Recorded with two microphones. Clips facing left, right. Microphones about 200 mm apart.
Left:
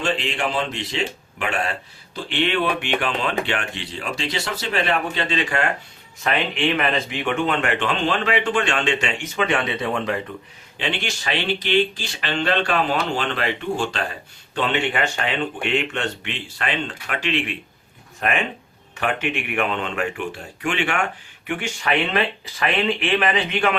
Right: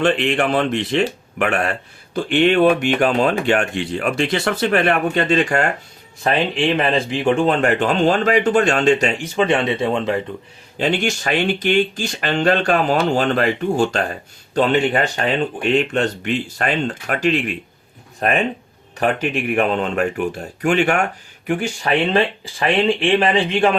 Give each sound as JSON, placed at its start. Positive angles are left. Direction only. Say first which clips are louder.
{"t": 0.0, "sound": "speech", "louder": "right 7 dB", "side_deg": -55}
{"t": 6.1, "sound": "speech", "louder": "right 5 dB", "side_deg": -35}
{"t": 10.8, "sound": "speech", "louder": "right 8 dB", "side_deg": -45}